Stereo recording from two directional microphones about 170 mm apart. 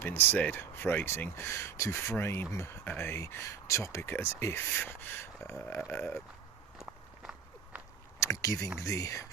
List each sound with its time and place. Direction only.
0.0 s speech: 10° left (ahead or behind)
6.7 s walk: 5° right (ahead or behind)
8.2 s speech: 20° left (ahead or behind)